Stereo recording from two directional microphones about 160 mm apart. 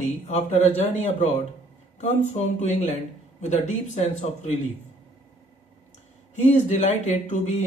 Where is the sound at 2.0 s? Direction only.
50° left (ahead or behind).